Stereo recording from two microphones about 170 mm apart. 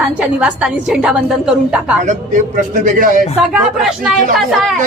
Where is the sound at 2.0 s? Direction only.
50° right (ahead or behind).